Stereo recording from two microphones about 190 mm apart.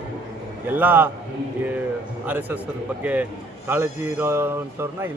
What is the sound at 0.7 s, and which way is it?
Speech, 10° right (ahead or behind).